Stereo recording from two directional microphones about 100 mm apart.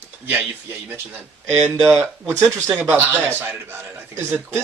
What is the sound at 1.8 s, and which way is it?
Speech, 10° right (ahead or behind).